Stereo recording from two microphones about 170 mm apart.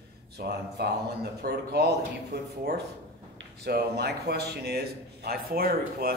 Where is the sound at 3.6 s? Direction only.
75° right (ahead or behind).